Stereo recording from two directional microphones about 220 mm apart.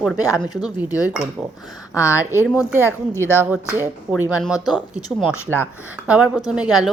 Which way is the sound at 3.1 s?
10° left (ahead or behind).